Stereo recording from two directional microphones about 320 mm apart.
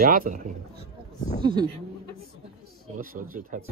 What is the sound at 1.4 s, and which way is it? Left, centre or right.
Speech, centre.